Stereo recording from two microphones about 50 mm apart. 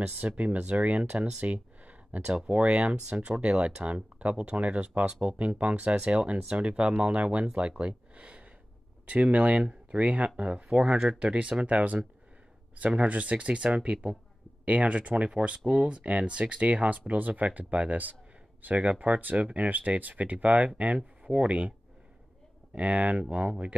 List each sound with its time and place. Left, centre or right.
0.4 s speech: right
22.8 s speech: right